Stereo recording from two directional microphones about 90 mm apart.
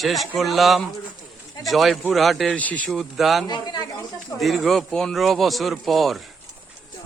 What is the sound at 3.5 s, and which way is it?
Speech, 55° left (ahead or behind).